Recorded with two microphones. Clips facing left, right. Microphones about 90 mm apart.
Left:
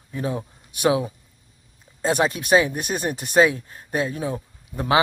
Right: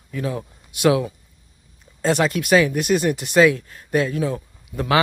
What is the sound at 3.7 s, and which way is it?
Speech, 20° left (ahead or behind).